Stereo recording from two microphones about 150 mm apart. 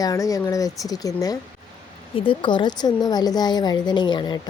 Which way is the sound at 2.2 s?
35° left (ahead or behind).